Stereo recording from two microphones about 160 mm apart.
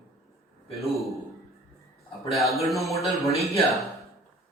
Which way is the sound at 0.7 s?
Centre (ahead or behind).